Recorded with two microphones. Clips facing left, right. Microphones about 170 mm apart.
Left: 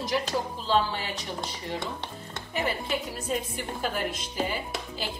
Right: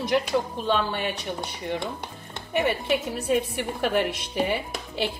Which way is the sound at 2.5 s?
65° right (ahead or behind).